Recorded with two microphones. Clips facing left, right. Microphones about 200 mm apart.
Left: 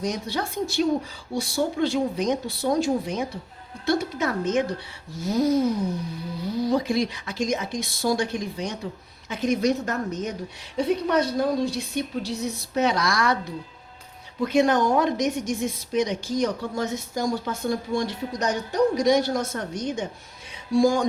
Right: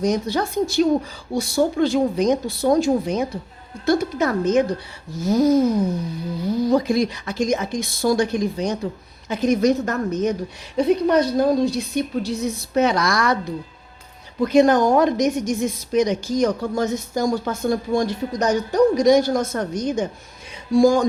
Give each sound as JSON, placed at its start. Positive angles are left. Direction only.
{"t": 0.0, "sound": "a woman's voice", "side_deg": -40}
{"t": 14.4, "sound": "a woman's voice", "side_deg": -40}